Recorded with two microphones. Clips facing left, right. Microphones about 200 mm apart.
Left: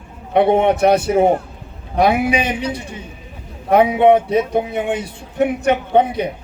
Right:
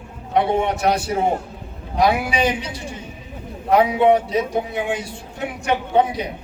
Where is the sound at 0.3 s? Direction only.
60° left (ahead or behind).